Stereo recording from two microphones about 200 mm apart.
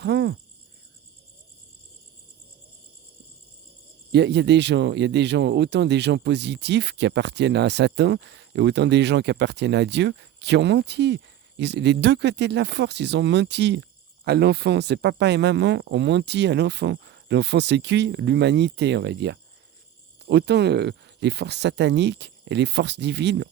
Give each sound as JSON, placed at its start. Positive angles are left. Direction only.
{"t": 0.0, "sound": "cricket", "side_deg": -60}
{"t": 4.1, "sound": "speech", "side_deg": -60}